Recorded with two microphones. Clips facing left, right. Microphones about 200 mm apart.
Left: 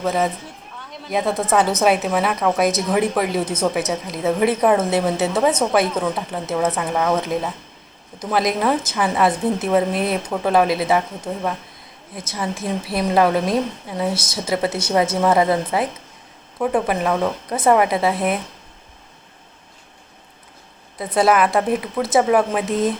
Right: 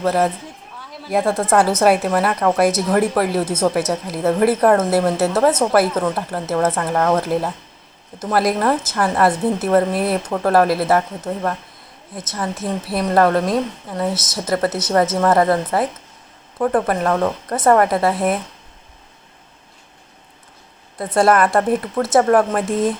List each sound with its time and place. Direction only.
0.0 s a woman's voice: 5° right (ahead or behind)
12.6 s a woman's voice: centre (ahead or behind)
16.6 s a woman's voice: 5° left (ahead or behind)
21.0 s a woman's voice: 5° left (ahead or behind)
22.6 s speech: 25° right (ahead or behind)